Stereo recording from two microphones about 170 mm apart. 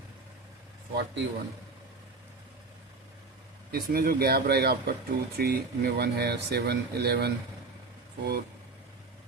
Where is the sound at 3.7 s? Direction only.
65° right (ahead or behind).